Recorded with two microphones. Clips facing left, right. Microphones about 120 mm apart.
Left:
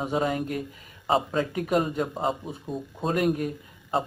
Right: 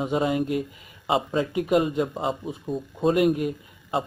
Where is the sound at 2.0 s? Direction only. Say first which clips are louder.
Right 1 dB; centre (ahead or behind).